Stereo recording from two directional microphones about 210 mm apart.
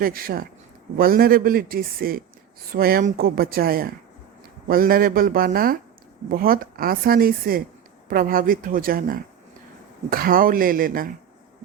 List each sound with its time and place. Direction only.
0.0 s a man's voice: 45° right (ahead or behind)